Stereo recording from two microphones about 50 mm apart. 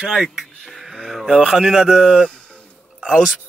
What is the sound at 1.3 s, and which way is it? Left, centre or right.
Speech, centre.